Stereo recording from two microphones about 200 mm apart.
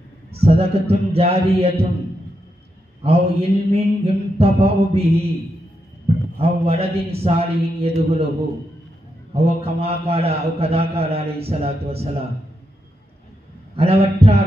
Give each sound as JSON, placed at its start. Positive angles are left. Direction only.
{"t": 0.4, "sound": "a man's voice", "side_deg": -30}
{"t": 3.0, "sound": "a man's voice", "side_deg": -30}
{"t": 6.6, "sound": "a man's voice", "side_deg": -30}
{"t": 9.3, "sound": "a man's voice", "side_deg": -30}
{"t": 13.7, "sound": "a man's voice", "side_deg": -30}